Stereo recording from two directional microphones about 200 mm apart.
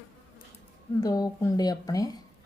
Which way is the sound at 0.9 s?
20° left (ahead or behind).